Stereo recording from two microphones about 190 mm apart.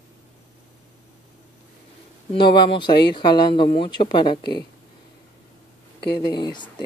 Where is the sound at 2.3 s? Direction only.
25° left (ahead or behind).